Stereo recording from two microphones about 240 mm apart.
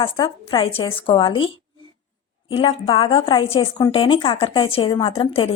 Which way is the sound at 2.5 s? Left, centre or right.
Left.